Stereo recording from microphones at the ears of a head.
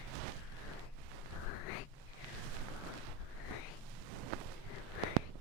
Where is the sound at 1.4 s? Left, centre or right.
Left.